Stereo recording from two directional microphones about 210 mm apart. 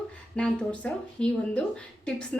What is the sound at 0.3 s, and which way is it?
A woman's voice, 5° left (ahead or behind).